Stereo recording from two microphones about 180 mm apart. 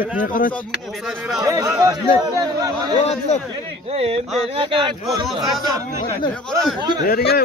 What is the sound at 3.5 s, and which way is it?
Speech, 30° right (ahead or behind).